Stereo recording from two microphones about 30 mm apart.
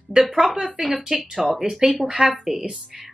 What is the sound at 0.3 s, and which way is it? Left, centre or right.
Speech, centre.